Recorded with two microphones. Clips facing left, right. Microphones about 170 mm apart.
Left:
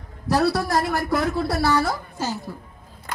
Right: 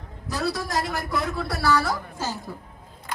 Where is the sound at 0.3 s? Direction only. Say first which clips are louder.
Left 7 dB; 65° left (ahead or behind).